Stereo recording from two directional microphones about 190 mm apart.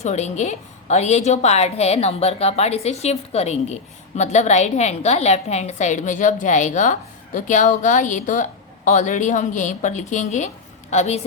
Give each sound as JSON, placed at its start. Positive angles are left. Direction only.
{"t": 0.0, "sound": "a woman's voice", "side_deg": 35}